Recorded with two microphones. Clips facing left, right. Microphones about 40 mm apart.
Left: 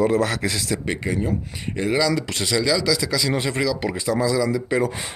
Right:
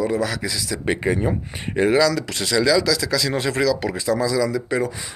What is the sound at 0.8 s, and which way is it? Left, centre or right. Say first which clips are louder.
Speech: right 4 dB; centre.